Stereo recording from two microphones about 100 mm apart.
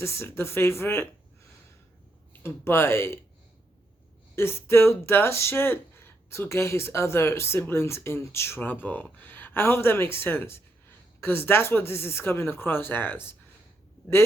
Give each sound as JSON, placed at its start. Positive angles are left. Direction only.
{"t": 0.0, "sound": "speech", "side_deg": 25}
{"t": 2.4, "sound": "speech", "side_deg": 25}
{"t": 4.4, "sound": "speech", "side_deg": 25}